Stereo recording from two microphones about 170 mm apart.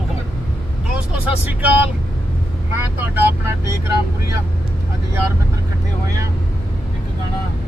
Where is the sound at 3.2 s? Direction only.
15° right (ahead or behind).